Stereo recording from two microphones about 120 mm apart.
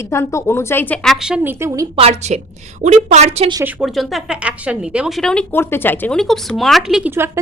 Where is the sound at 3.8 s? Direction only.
5° right (ahead or behind).